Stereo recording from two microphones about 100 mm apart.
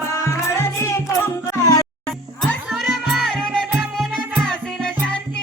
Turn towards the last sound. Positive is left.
turn(degrees=10)  # may be behind; listen again after turning